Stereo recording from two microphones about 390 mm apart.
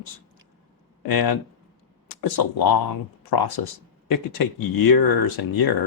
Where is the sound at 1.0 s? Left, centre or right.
Left.